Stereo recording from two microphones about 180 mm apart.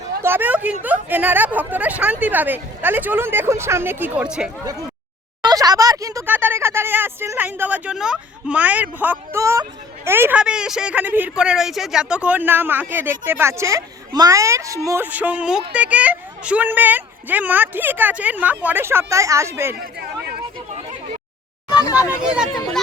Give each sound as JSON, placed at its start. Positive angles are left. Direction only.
{"t": 0.2, "sound": "speech", "side_deg": -10}
{"t": 5.4, "sound": "speech", "side_deg": -20}
{"t": 19.8, "sound": "speech", "side_deg": -60}
{"t": 21.8, "sound": "speech", "side_deg": 20}
{"t": 22.2, "sound": "speech", "side_deg": -5}